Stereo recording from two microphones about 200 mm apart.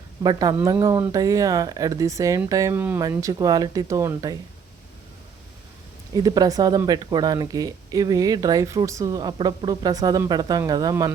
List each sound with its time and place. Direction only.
0.2 s speech: 20° right (ahead or behind)
6.1 s speech: 20° right (ahead or behind)